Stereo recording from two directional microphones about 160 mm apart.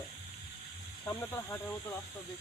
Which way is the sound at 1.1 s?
15° left (ahead or behind).